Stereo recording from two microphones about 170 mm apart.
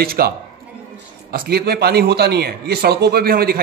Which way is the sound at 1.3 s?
65° right (ahead or behind).